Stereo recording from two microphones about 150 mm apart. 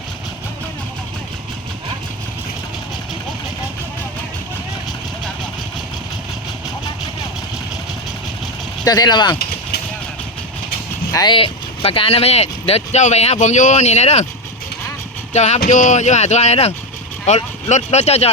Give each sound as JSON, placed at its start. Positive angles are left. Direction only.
{"t": 8.8, "sound": "speech", "side_deg": 25}
{"t": 11.1, "sound": "speech", "side_deg": 25}
{"t": 11.3, "sound": "speech", "side_deg": 40}
{"t": 15.3, "sound": "speech", "side_deg": 45}